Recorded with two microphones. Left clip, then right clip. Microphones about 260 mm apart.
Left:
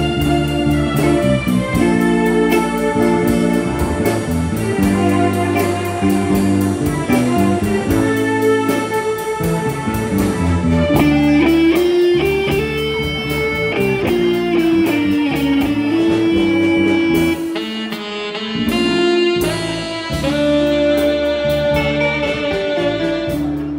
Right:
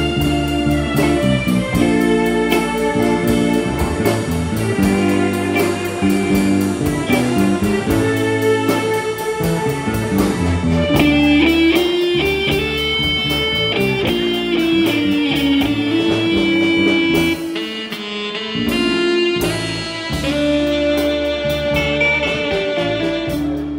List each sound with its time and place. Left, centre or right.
1.9 s music: centre
4.7 s music: centre
11.0 s music: centre
13.7 s music: centre
16.8 s music: centre
18.8 s music: left
20.3 s music: left